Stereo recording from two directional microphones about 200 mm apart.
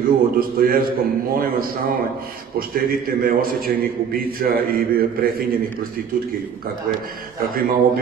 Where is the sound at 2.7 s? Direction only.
45° right (ahead or behind).